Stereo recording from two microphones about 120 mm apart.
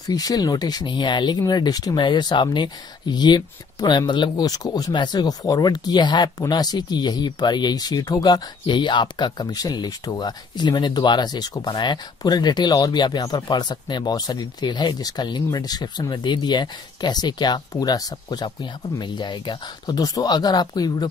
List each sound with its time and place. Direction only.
0.0 s speech: 30° left (ahead or behind)